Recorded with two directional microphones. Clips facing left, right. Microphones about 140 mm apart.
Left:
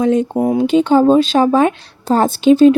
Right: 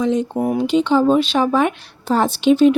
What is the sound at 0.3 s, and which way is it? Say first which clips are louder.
Speech: left 4 dB; 20° left (ahead or behind).